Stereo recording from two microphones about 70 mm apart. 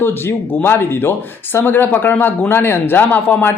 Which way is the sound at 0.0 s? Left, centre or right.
Left.